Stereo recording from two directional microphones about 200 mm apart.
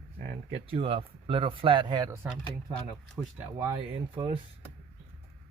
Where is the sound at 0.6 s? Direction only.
30° right (ahead or behind).